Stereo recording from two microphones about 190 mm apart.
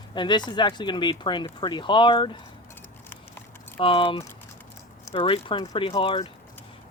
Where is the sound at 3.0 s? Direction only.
10° left (ahead or behind).